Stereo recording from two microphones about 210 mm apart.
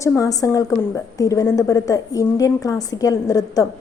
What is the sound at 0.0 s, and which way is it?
A woman's voice, 15° left (ahead or behind).